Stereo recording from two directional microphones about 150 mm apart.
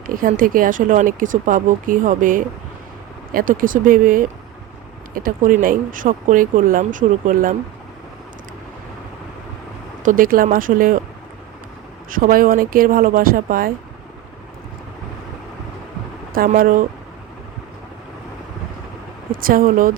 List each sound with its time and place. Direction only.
0.3 s speech: 65° right (ahead or behind)
10.0 s speech: 65° right (ahead or behind)
12.1 s speech: 70° right (ahead or behind)
16.3 s speech: 70° right (ahead or behind)
19.3 s speech: 70° right (ahead or behind)